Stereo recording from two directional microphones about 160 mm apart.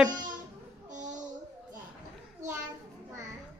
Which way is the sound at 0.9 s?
50° right (ahead or behind).